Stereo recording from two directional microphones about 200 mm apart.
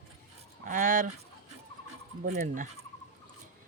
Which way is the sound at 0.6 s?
40° right (ahead or behind).